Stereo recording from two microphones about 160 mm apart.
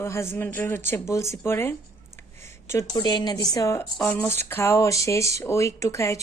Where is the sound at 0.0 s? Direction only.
15° left (ahead or behind).